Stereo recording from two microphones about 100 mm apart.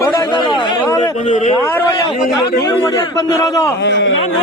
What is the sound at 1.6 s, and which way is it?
A man's voice, 30° left (ahead or behind).